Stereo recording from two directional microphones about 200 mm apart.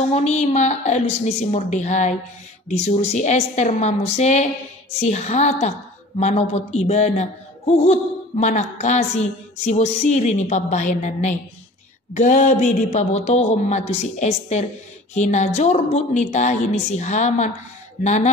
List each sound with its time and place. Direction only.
0.1 s a woman's voice: 35° left (ahead or behind)